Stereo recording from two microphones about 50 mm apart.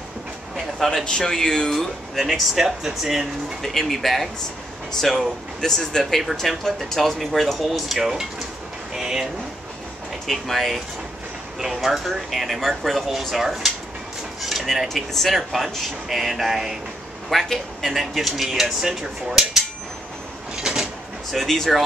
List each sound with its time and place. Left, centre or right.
0.7 s speech: centre
1.0 s speech: centre
2.2 s speech: centre
8.9 s a sound: centre
10.2 s speech: centre
14.4 s dishes: centre
14.9 s speech: centre
20.5 s a sound: centre
21.3 s speech: centre